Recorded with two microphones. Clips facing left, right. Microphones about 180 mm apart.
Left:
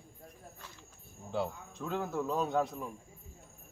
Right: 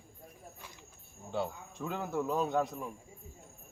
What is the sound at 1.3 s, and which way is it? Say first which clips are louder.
Speech: even; centre (ahead or behind).